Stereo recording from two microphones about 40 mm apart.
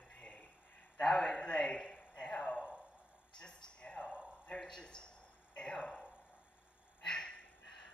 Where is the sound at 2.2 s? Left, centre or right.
Centre.